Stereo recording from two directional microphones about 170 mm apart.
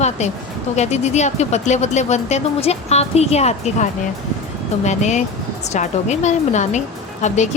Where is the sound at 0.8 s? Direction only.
40° left (ahead or behind).